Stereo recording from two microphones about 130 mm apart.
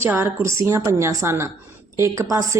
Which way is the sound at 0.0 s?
20° right (ahead or behind).